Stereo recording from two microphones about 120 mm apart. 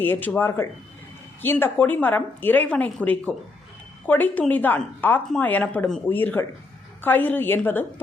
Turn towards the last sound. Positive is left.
turn(degrees=15)  # may be behind; listen again after turning